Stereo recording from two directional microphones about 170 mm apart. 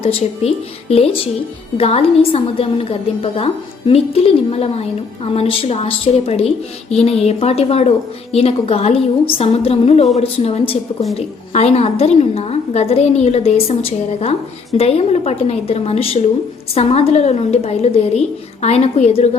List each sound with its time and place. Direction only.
0.0 s a woman's voice: 35° left (ahead or behind)